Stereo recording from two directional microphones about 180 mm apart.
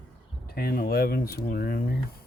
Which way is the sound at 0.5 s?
55° left (ahead or behind).